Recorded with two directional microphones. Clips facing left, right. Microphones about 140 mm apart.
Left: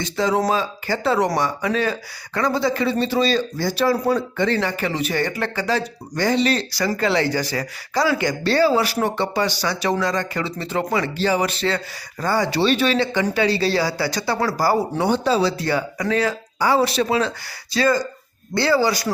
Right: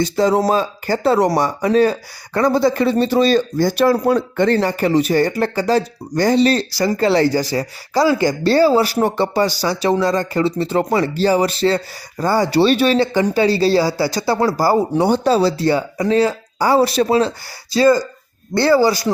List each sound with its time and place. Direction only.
0.0 s speech: 35° right (ahead or behind)
15.0 s speech: 45° right (ahead or behind)
18.5 s speech: 45° right (ahead or behind)